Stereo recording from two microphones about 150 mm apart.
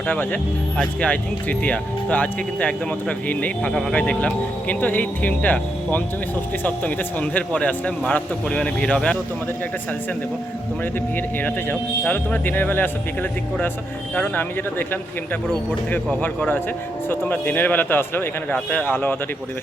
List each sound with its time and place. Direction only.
0.1 s speech: 10° left (ahead or behind)
11.3 s speech: 10° left (ahead or behind)
14.2 s speech: 15° left (ahead or behind)
16.2 s speech: 10° left (ahead or behind)